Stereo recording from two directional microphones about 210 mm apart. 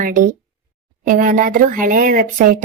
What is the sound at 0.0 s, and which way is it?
Speech, 40° right (ahead or behind).